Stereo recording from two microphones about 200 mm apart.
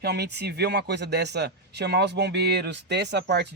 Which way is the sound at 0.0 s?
55° right (ahead or behind).